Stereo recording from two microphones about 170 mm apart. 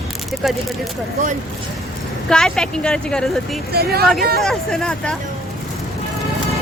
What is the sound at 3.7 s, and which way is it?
Speech, 65° right (ahead or behind).